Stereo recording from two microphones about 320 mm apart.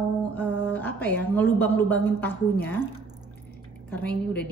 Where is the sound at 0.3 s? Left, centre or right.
Centre.